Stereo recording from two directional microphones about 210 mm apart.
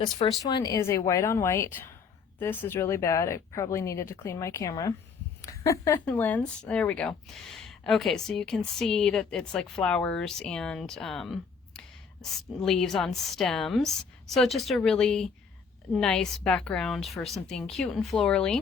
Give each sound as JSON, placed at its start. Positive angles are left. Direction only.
{"t": 0.4, "sound": "speech", "side_deg": 20}